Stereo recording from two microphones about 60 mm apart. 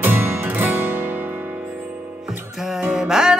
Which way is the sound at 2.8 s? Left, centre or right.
Centre.